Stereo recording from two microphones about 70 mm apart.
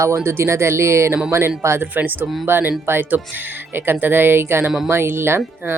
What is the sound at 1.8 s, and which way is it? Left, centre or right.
Speech, right.